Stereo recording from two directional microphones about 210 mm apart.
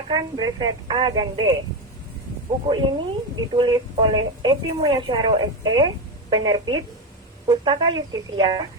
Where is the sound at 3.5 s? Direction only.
20° right (ahead or behind).